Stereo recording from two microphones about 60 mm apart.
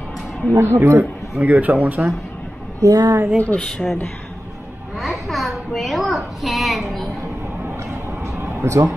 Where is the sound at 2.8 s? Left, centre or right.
Right.